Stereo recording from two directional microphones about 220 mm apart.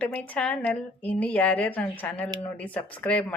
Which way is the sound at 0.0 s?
5° left (ahead or behind).